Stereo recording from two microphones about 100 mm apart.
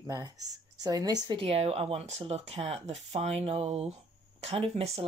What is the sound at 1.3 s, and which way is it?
Speech, 70° right (ahead or behind).